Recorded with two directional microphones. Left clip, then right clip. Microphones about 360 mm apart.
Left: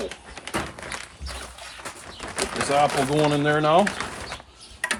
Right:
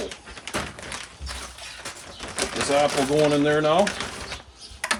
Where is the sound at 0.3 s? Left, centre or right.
Centre.